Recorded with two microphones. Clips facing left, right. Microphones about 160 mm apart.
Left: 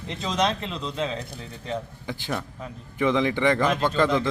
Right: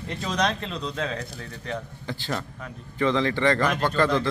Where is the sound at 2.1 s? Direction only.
10° left (ahead or behind).